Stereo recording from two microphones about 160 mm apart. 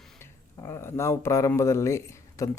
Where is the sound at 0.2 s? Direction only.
15° left (ahead or behind).